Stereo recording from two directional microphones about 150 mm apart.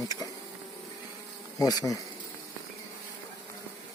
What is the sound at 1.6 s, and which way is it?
Speech, 25° left (ahead or behind).